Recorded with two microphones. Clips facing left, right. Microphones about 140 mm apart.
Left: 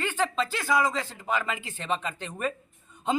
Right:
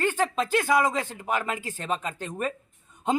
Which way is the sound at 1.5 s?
45° right (ahead or behind).